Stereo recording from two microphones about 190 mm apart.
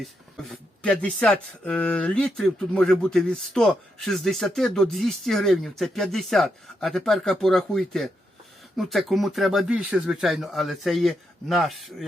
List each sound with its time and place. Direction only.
0.0 s speech: centre (ahead or behind)